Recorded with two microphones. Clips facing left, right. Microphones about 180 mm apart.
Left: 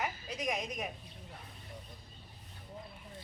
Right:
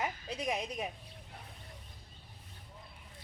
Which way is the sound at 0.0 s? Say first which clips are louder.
Even; 30° right (ahead or behind).